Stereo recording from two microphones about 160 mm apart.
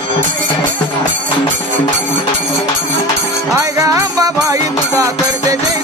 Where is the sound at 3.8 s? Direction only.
20° right (ahead or behind).